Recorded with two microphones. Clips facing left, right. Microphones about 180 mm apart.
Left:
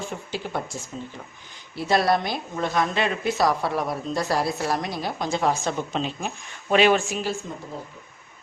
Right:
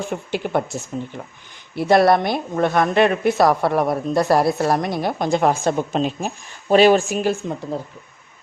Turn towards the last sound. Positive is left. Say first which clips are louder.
# right 8 dB
turn(degrees=-55)  # may be behind; listen again after turning